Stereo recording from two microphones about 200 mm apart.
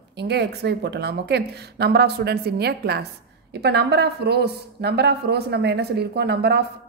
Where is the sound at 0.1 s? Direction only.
55° right (ahead or behind).